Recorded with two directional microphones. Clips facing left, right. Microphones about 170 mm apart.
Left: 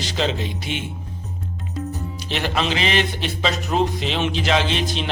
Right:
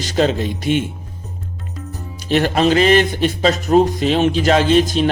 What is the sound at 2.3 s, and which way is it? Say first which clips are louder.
Music: right 9 dB; 45° right (ahead or behind).